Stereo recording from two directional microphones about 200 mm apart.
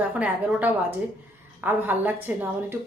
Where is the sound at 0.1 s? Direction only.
5° right (ahead or behind).